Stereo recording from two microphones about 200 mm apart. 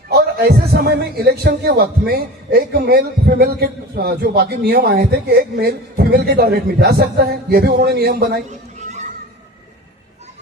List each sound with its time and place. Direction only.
0.1 s speech: 50° right (ahead or behind)